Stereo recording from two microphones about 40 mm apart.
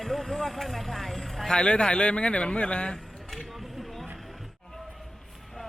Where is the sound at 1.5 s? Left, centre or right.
Left.